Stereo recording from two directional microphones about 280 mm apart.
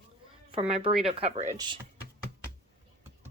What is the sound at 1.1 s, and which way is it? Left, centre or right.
Speech, right.